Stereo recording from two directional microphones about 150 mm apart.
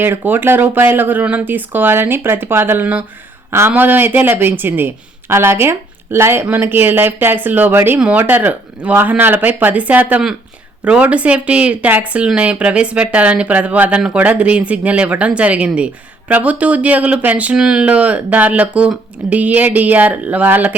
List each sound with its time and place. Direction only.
0.0 s speech: 15° right (ahead or behind)